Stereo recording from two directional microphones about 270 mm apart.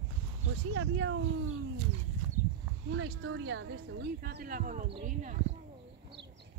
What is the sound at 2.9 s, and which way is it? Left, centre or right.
Speech, right.